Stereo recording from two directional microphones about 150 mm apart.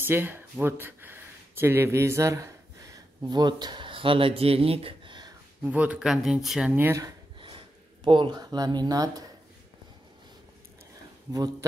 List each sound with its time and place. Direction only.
0.0 s speech: 15° right (ahead or behind); by 5.3 s 30° right (ahead or behind)
5.6 s speech: 10° right (ahead or behind)
7.3 s a sound: 35° right (ahead or behind)